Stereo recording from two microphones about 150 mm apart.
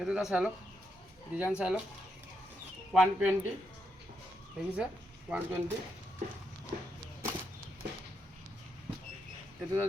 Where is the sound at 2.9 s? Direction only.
5° right (ahead or behind).